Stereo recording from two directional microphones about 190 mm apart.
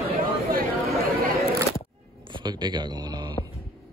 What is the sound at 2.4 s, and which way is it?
Speech, 20° right (ahead or behind).